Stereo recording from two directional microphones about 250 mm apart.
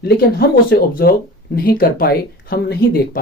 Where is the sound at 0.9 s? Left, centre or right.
Left.